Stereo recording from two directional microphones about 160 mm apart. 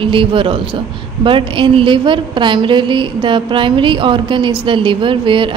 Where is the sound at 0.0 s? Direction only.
30° right (ahead or behind).